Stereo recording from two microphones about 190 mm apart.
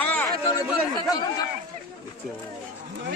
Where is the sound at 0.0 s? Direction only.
10° left (ahead or behind).